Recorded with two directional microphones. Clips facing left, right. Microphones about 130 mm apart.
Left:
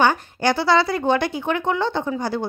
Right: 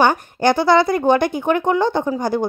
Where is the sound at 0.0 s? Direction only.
50° right (ahead or behind).